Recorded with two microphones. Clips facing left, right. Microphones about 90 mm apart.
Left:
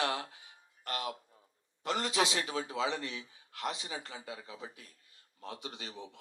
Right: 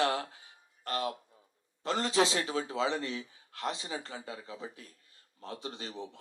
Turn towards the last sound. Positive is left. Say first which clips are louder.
# right 4 dB
turn(degrees=-35)  # may be behind; listen again after turning